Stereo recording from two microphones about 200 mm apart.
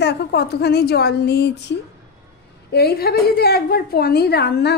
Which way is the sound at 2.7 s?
50° left (ahead or behind).